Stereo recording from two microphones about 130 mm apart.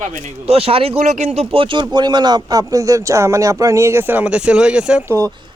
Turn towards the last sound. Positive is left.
turn(degrees=-25)  # may be behind; listen again after turning